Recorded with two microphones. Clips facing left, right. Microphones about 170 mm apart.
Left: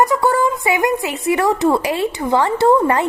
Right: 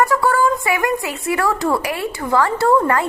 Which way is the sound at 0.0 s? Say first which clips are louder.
Left 1 dB; 20° left (ahead or behind).